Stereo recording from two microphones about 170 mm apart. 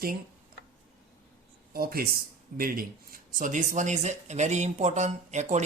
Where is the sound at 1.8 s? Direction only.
60° right (ahead or behind).